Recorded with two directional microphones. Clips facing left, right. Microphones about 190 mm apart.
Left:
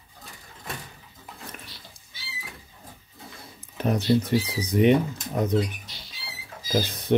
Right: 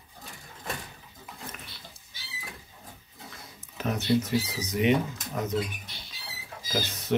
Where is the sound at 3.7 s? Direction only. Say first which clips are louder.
Left 6 dB; 35° left (ahead or behind).